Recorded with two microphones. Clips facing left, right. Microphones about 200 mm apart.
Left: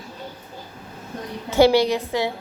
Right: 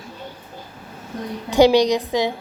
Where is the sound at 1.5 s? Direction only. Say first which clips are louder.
Right 2 dB; 15° right (ahead or behind).